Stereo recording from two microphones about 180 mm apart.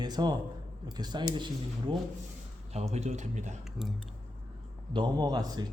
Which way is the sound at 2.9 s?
40° right (ahead or behind).